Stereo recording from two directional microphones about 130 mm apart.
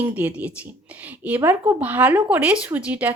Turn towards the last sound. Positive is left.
turn(degrees=-10)  # may be behind; listen again after turning